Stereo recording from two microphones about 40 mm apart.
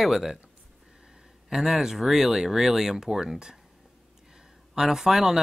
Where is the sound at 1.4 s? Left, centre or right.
Centre.